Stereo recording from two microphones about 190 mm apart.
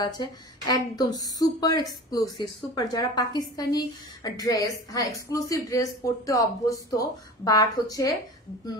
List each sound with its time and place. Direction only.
0.7 s a woman's voice: 20° left (ahead or behind)